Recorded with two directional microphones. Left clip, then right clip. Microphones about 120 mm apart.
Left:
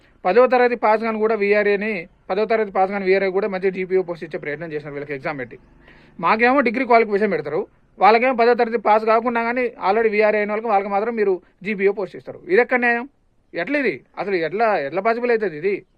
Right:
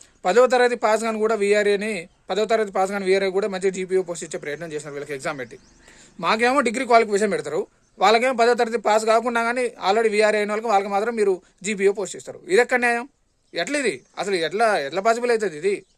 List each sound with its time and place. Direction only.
0.2 s speech: 30° right (ahead or behind)